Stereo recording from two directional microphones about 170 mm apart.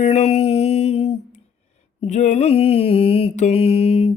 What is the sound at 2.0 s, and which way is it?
Mantra, 40° left (ahead or behind).